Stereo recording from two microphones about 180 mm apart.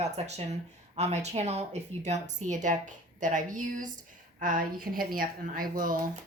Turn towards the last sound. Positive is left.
turn(degrees=-50)  # may be behind; listen again after turning